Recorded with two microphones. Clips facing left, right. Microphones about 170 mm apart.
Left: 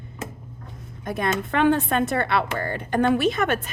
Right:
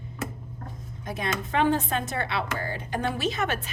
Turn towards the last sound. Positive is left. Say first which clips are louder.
# left 6 dB
turn(degrees=55)  # may be behind; listen again after turning